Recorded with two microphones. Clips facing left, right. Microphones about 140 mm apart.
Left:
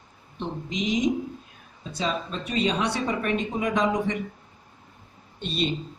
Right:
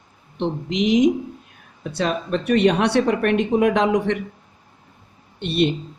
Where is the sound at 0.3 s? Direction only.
70° right (ahead or behind).